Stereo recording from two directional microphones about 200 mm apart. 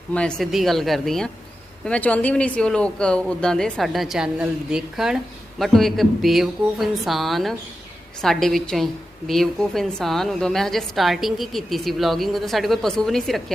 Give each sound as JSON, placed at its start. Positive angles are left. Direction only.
{"t": 0.1, "sound": "speech", "side_deg": 5}